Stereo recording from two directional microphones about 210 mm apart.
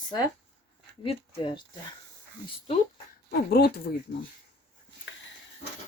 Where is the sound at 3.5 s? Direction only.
45° left (ahead or behind).